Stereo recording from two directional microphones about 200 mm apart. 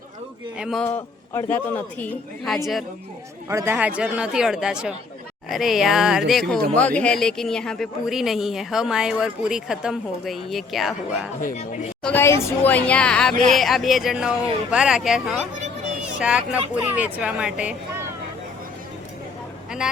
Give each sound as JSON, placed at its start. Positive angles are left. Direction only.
{"t": 0.6, "sound": "speech", "side_deg": 0}
{"t": 0.9, "sound": "a woman's voice", "side_deg": 10}
{"t": 3.5, "sound": "speech", "side_deg": -15}
{"t": 11.3, "sound": "speech", "side_deg": 40}
{"t": 12.0, "sound": "speech", "side_deg": 10}